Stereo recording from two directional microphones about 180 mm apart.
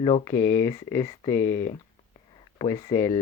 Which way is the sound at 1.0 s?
30° left (ahead or behind).